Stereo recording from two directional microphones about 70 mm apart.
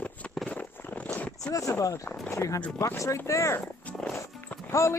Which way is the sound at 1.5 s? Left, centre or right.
Left.